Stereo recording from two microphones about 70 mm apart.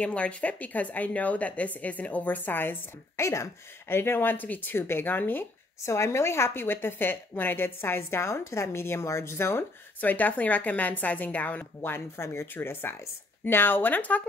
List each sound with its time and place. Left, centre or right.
0.0 s speech: centre
5.8 s a woman's voice: left